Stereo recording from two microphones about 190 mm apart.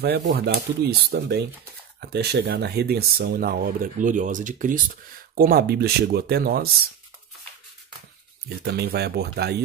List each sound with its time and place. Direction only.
0.3 s speech: 60° right (ahead or behind)
8.5 s speech: 55° right (ahead or behind)